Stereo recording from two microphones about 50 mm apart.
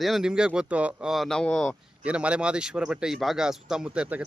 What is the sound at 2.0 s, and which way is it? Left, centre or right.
Speech, right.